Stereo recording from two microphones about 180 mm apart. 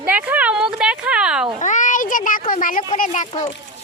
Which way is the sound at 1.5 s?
45° left (ahead or behind).